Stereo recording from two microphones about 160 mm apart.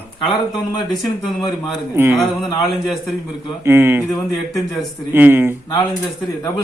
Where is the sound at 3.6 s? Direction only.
15° right (ahead or behind).